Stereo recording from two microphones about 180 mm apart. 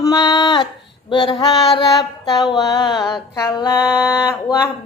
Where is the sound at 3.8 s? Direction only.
5° right (ahead or behind).